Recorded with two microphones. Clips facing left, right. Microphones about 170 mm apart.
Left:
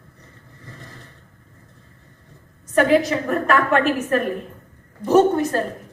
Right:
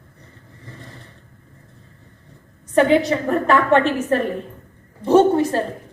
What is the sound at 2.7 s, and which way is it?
A woman's voice, 25° right (ahead or behind).